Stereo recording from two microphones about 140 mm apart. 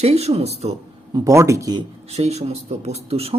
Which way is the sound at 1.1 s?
25° right (ahead or behind).